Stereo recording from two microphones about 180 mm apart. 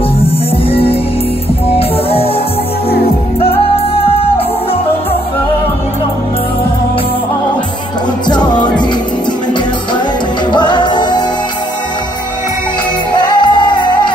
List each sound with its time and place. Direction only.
0.2 s music: 30° left (ahead or behind)
3.3 s music: 30° left (ahead or behind)
8.3 s music: 25° left (ahead or behind)
10.5 s music: 25° left (ahead or behind)
13.1 s music: 25° left (ahead or behind)